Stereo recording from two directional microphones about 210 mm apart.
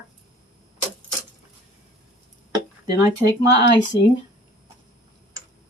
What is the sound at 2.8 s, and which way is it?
Speech, 15° right (ahead or behind).